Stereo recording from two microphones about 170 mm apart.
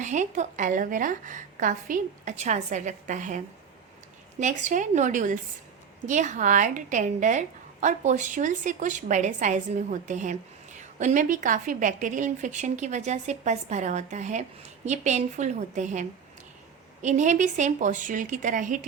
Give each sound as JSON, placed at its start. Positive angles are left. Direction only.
{"t": 0.0, "sound": "a woman's voice", "side_deg": -45}